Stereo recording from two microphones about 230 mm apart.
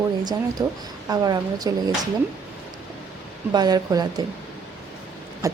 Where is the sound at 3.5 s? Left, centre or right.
Centre.